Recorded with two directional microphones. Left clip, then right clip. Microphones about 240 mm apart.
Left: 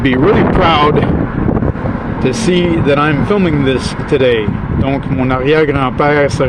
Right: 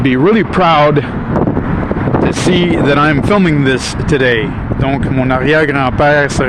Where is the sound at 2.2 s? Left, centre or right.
Centre.